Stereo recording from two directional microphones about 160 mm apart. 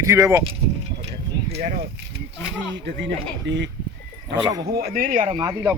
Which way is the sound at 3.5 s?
90° right.